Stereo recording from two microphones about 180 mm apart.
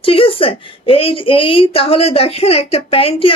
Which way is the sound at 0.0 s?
30° left (ahead or behind).